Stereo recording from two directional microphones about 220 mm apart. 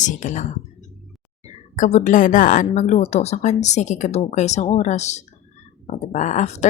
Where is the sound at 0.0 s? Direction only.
35° left (ahead or behind).